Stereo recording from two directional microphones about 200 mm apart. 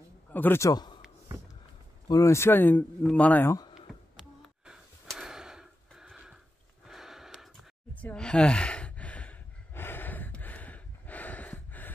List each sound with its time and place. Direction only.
0.3 s a man's voice: 10° left (ahead or behind)
2.0 s speech: 15° left (ahead or behind)
4.2 s gasp: centre (ahead or behind)
6.9 s sigh: centre (ahead or behind)